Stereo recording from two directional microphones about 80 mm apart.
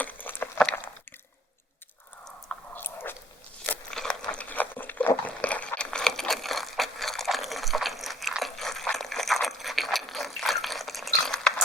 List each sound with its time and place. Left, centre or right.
0.0 s a sound: left
2.7 s biting: left
3.9 s crunch: centre
8.4 s liquid: centre